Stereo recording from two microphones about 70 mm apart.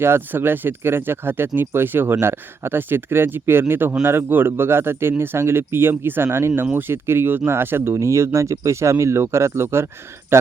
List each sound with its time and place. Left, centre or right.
0.0 s speech: right